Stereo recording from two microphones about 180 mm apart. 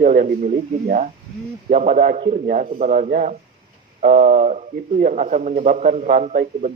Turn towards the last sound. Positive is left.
turn(degrees=-45)  # may be behind; listen again after turning